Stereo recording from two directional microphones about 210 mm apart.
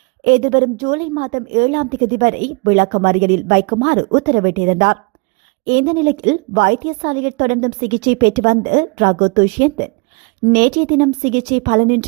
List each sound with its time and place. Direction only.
0.3 s a woman's voice: 40° right (ahead or behind)